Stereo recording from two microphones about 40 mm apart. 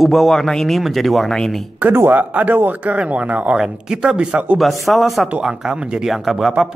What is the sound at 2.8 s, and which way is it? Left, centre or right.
Speech, right.